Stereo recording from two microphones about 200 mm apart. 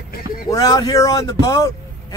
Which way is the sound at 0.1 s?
45° left (ahead or behind).